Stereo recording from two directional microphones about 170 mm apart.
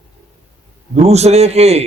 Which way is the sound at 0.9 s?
40° right (ahead or behind).